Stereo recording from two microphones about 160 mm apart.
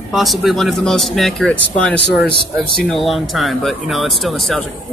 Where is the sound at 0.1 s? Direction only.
Centre (ahead or behind).